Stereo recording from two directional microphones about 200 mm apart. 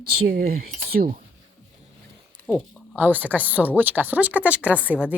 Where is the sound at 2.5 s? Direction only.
5° right (ahead or behind).